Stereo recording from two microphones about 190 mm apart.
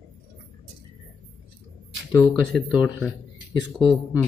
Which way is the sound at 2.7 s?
5° right (ahead or behind).